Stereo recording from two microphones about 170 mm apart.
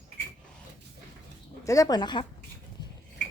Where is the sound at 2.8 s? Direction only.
25° left (ahead or behind).